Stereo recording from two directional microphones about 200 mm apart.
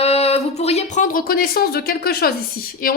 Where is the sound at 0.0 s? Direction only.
30° left (ahead or behind); by 2.3 s 50° left (ahead or behind).